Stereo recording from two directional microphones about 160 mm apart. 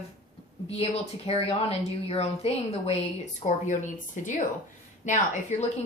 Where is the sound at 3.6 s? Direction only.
50° left (ahead or behind).